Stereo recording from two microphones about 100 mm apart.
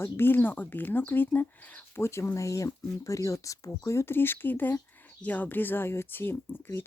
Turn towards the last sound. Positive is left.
turn(degrees=20)  # may be behind; listen again after turning